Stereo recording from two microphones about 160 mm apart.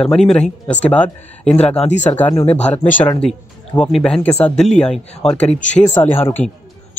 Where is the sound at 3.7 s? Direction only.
5° left (ahead or behind).